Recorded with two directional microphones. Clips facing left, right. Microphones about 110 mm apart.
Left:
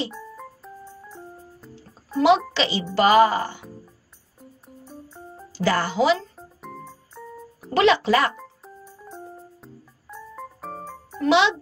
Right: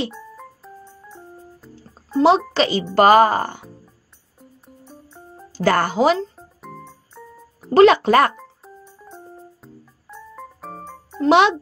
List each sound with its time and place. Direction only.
0.1 s music: centre (ahead or behind)
2.1 s a child's voice: 35° right (ahead or behind)
2.5 s speech: 45° right (ahead or behind)
4.4 s music: centre (ahead or behind)
5.5 s speech: 50° right (ahead or behind)
6.3 s music: centre (ahead or behind)
7.7 s speech: 50° right (ahead or behind)
8.8 s music: 5° left (ahead or behind)
11.2 s speech: 50° right (ahead or behind)